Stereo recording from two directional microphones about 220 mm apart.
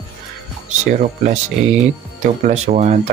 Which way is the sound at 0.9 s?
35° right (ahead or behind).